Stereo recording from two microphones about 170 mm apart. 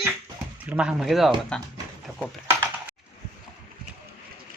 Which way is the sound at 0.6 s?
5° right (ahead or behind).